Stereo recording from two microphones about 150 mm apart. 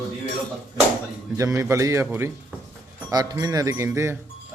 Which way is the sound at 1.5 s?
20° right (ahead or behind).